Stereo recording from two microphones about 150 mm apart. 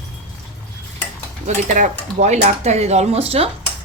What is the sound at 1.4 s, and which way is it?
A woman's voice, 55° right (ahead or behind).